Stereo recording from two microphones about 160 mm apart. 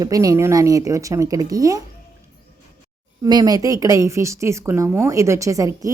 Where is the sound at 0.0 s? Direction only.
20° right (ahead or behind).